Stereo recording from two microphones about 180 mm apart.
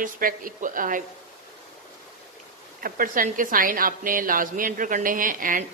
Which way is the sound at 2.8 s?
50° right (ahead or behind).